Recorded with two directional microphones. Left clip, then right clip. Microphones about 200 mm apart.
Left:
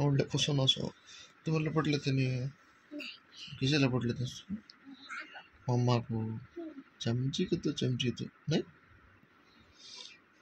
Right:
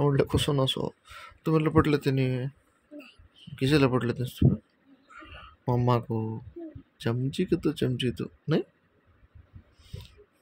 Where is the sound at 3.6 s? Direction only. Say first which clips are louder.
Right 7 dB; 40° right (ahead or behind).